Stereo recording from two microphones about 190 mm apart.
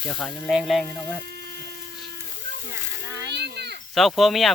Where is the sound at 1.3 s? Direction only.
60° right (ahead or behind).